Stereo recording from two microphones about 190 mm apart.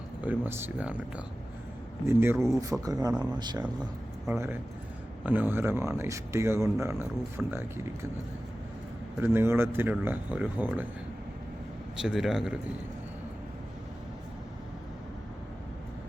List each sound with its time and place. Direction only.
0.2 s speech: 10° right (ahead or behind)
4.3 s speech: 10° right (ahead or behind)
7.4 s a man's voice: 5° right (ahead or behind)
9.2 s speech: 15° right (ahead or behind)
11.9 s a man's voice: centre (ahead or behind)